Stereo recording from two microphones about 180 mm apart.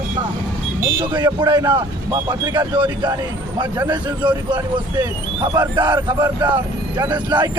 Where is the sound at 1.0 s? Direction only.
25° right (ahead or behind).